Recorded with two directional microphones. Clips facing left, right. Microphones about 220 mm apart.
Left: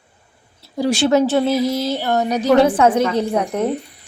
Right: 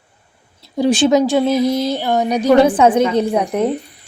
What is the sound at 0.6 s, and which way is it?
Speech, 20° right (ahead or behind).